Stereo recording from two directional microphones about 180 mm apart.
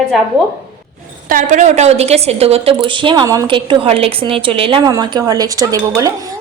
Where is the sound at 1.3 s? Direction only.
45° right (ahead or behind).